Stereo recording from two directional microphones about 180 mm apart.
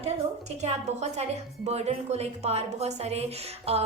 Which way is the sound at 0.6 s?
40° right (ahead or behind).